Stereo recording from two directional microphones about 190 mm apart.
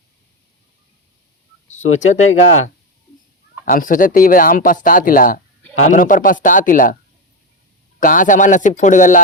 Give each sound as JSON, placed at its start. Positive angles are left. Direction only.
{"t": 1.6, "sound": "speech", "side_deg": 40}
{"t": 3.7, "sound": "speech", "side_deg": 45}
{"t": 7.9, "sound": "speech", "side_deg": 45}